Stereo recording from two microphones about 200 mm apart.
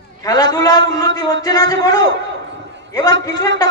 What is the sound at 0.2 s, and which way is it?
A man's voice, 20° left (ahead or behind).